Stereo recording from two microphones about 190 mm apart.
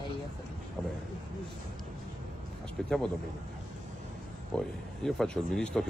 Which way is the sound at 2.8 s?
Centre (ahead or behind).